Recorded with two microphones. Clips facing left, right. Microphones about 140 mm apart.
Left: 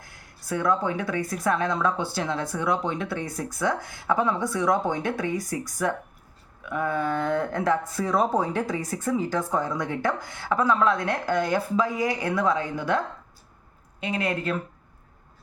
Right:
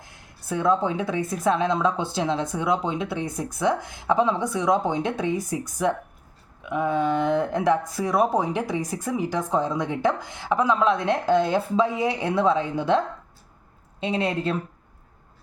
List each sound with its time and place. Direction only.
0.0 s a woman's voice: 25° right (ahead or behind)
14.0 s a woman's voice: 30° right (ahead or behind)